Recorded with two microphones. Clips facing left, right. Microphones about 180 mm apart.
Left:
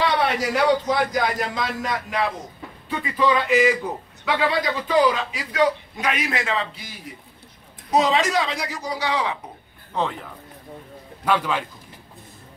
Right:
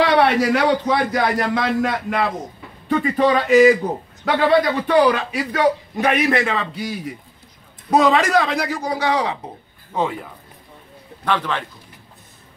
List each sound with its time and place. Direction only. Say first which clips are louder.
0.0 s a man's voice: right 6 dB; 65° right (ahead or behind)
2.9 s a man's voice: right 5 dB; 50° right (ahead or behind); by 7.2 s 65° right (ahead or behind)
7.9 s a man's voice: right 4 dB; 55° right (ahead or behind); by 9.4 s 40° right (ahead or behind)
9.9 s speech: right 3 dB; 10° right (ahead or behind)
11.2 s a man's voice: even; 10° left (ahead or behind)